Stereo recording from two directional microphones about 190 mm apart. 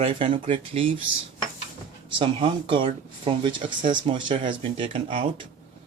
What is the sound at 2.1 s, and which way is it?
Speech, 25° right (ahead or behind).